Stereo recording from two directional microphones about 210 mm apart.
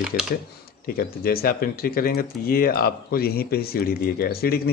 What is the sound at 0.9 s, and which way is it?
Speech, 45° left (ahead or behind).